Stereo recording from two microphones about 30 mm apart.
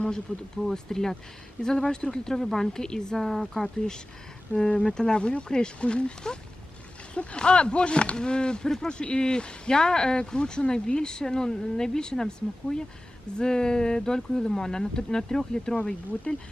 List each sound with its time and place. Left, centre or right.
0.0 s a woman's voice: left
4.5 s speech: left
16.3 s speech: left